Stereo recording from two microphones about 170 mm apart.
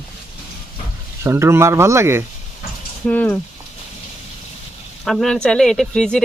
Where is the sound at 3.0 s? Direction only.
10° left (ahead or behind).